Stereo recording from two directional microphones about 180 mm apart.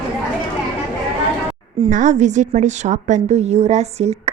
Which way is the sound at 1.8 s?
40° right (ahead or behind).